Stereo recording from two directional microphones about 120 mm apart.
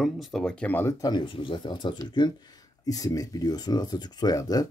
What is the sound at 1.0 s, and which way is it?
Speech, 40° left (ahead or behind).